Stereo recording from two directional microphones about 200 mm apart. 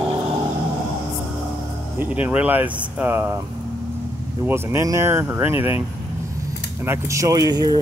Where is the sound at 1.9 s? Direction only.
10° right (ahead or behind).